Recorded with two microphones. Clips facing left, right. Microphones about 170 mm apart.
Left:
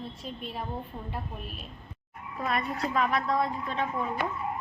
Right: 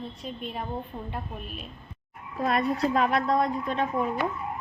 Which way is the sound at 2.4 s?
35° right (ahead or behind).